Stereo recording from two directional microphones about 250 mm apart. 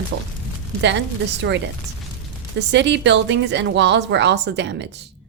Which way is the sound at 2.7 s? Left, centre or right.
Right.